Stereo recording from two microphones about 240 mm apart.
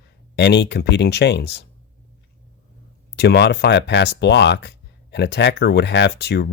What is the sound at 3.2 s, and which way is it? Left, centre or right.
Speech, left.